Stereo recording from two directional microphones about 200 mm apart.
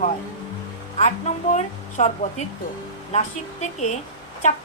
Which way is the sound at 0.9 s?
35° left (ahead or behind).